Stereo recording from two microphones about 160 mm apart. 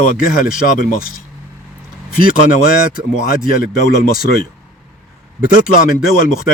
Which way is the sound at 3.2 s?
65° left (ahead or behind).